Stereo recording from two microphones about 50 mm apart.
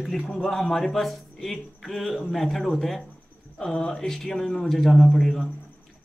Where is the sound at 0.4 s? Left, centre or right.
Centre.